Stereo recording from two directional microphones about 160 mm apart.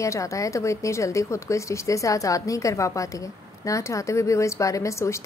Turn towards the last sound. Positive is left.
turn(degrees=20)  # may be behind; listen again after turning